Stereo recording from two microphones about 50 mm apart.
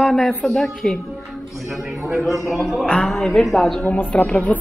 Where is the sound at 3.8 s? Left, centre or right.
Left.